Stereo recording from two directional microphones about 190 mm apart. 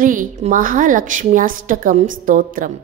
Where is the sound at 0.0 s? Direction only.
45° right (ahead or behind).